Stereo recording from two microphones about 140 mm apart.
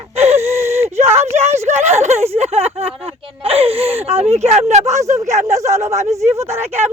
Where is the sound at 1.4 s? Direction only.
55° right (ahead or behind).